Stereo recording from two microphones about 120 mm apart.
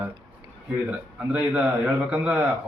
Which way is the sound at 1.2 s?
10° right (ahead or behind).